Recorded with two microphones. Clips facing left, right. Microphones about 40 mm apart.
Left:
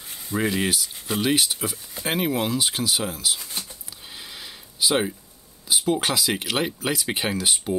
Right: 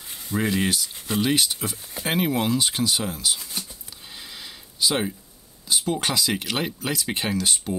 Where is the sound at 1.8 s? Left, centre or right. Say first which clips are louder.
Right 2 dB; centre.